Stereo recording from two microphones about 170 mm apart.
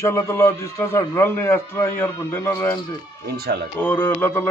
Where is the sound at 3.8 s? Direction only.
10° left (ahead or behind).